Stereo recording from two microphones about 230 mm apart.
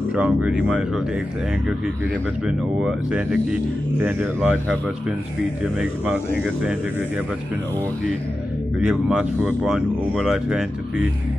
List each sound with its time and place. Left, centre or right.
0.1 s speech: centre
2.4 s speech: centre
5.8 s speech: centre
8.8 s speech: centre